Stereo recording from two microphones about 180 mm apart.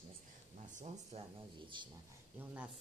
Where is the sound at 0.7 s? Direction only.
40° right (ahead or behind).